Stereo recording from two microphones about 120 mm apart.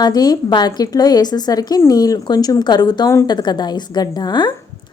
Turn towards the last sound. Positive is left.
turn(degrees=35)  # may be behind; listen again after turning